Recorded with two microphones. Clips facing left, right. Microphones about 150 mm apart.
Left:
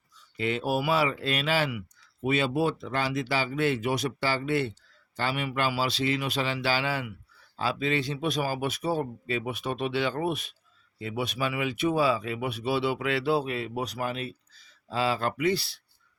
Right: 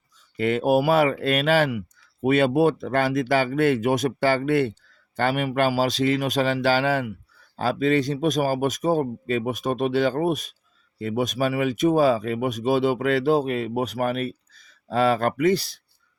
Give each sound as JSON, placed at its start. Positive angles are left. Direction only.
{"t": 0.3, "sound": "speech", "side_deg": -50}